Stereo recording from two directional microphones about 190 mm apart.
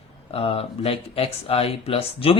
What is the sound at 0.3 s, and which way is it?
Speech, 30° left (ahead or behind).